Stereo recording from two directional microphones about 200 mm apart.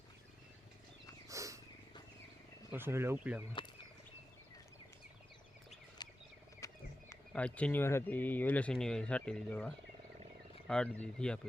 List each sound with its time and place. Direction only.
1.3 s wild animals: 15° right (ahead or behind)
2.7 s speech: 10° right (ahead or behind)
6.0 s wild animals: 20° left (ahead or behind)
6.6 s frog: 15° left (ahead or behind)
7.1 s speech: 5° left (ahead or behind)